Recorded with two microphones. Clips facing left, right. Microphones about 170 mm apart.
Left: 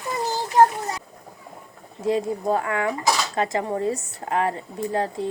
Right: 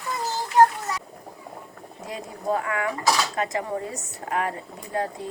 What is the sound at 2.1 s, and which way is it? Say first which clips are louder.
A woman's voice: left 6 dB; 30° left (ahead or behind).